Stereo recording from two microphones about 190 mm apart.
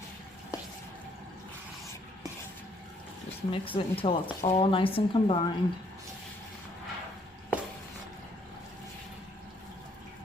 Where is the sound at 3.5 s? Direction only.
30° left (ahead or behind).